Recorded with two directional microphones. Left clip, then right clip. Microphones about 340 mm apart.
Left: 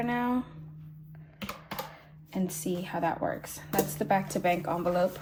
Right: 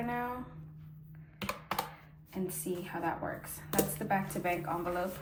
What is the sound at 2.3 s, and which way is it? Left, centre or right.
A woman's voice, centre.